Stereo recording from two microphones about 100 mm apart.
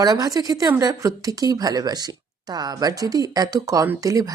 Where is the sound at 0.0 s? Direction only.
40° right (ahead or behind).